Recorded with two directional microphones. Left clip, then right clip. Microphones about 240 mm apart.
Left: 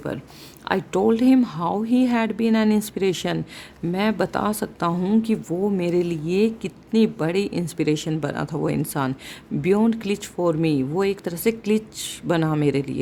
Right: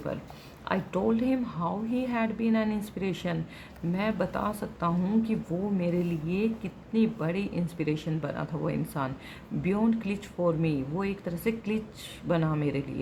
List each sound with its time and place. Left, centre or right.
0.6 s speech: left